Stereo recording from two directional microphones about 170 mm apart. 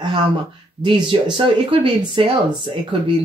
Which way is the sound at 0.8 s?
30° right (ahead or behind).